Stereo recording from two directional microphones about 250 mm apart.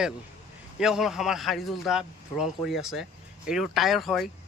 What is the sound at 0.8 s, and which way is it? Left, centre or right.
A man's voice, centre.